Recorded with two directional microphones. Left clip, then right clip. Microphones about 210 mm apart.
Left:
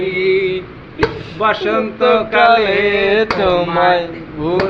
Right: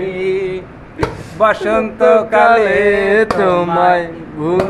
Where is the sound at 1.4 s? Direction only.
30° right (ahead or behind).